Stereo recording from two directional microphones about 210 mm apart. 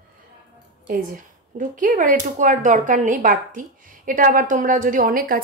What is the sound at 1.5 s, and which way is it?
A woman's voice, 40° right (ahead or behind).